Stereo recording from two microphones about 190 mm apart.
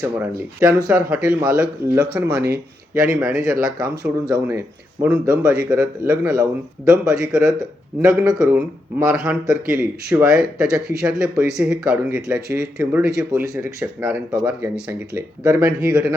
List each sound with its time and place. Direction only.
0.0 s speech: 15° right (ahead or behind)
7.0 s speech: 5° right (ahead or behind)
8.0 s speech: 15° right (ahead or behind)
9.1 s speech: 5° right (ahead or behind)